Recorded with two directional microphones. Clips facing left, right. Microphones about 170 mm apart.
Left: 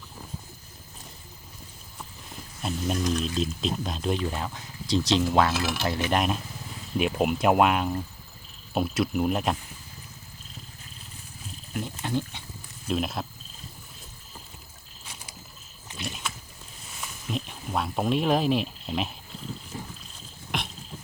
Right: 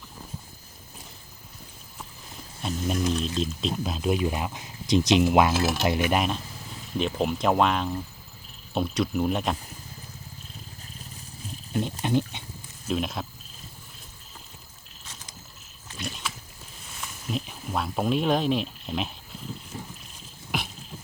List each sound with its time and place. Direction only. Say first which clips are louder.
2.6 s speech: right 1 dB; centre (ahead or behind); by 5.6 s 15° right (ahead or behind)
6.1 s speech: even; centre (ahead or behind)
11.7 s speech: right 4 dB; 20° right (ahead or behind)
12.9 s speech: even; centre (ahead or behind)
15.0 s a sound: left 1 dB; 10° left (ahead or behind)
17.0 s speech: right 1 dB; centre (ahead or behind)
20.5 s a sound: right 1 dB; 5° right (ahead or behind)